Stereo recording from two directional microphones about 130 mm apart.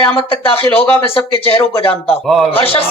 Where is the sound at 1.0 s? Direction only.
45° left (ahead or behind).